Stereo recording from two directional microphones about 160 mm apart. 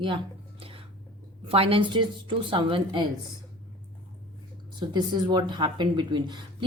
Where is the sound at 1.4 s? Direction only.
35° right (ahead or behind).